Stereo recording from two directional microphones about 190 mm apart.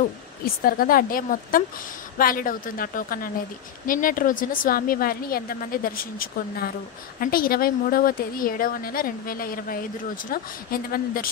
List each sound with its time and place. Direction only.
0.7 s a woman's voice: 50° left (ahead or behind)